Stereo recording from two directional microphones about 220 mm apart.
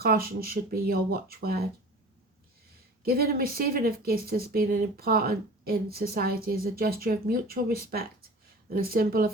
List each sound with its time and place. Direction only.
0.0 s speech: 40° right (ahead or behind)
3.0 s speech: 45° right (ahead or behind)